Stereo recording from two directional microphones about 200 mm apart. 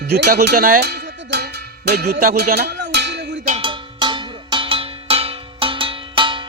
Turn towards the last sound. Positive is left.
turn(degrees=-25)  # may be behind; listen again after turning